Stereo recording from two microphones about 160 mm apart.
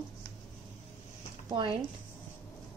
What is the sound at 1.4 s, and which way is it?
Speech, 30° right (ahead or behind).